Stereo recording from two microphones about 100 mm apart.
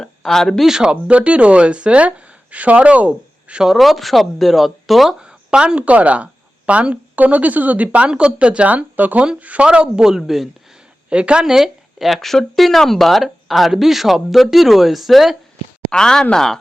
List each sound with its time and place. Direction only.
0.0 s speech: 5° left (ahead or behind)